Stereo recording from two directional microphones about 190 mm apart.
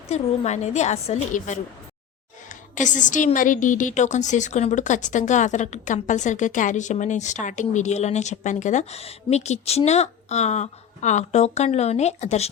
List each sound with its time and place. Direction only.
0.1 s a woman's voice: 35° left (ahead or behind)